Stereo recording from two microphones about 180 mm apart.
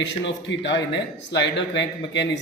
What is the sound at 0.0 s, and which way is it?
A man's voice, 85° left.